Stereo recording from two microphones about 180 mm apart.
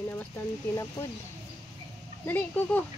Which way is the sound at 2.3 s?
10° left (ahead or behind).